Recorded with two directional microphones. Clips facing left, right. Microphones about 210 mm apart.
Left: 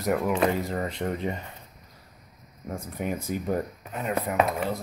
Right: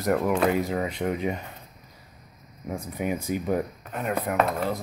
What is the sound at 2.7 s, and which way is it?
Speech, 5° right (ahead or behind).